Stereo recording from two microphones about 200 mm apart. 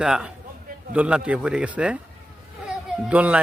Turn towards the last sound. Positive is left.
turn(degrees=-5)  # may be behind; listen again after turning